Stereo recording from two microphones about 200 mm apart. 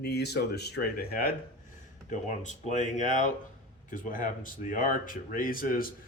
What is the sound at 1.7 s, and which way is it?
Speech, 40° left (ahead or behind).